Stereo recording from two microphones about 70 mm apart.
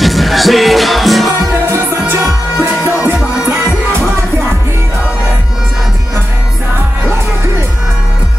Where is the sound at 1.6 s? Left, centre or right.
Right.